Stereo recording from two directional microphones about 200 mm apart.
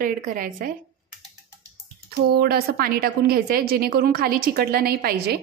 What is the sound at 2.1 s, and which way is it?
A woman's voice, 50° right (ahead or behind).